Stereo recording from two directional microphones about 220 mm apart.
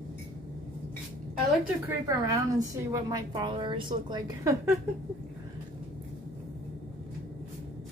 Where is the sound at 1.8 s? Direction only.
15° right (ahead or behind).